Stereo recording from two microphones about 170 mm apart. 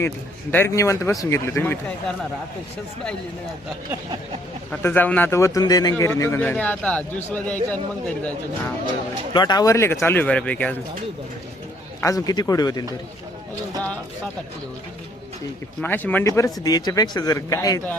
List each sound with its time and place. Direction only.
0.5 s speech: 15° left (ahead or behind)
4.7 s speech: 10° left (ahead or behind)
9.3 s speech: 25° left (ahead or behind); by 10.8 s 10° left (ahead or behind)
11.9 s speech: 20° left (ahead or behind)
15.8 s speech: 10° left (ahead or behind)